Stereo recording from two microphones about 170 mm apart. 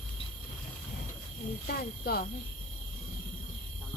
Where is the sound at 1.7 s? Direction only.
65° left (ahead or behind).